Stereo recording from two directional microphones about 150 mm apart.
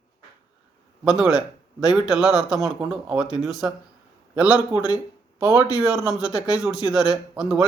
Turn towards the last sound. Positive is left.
turn(degrees=-5)  # may be behind; listen again after turning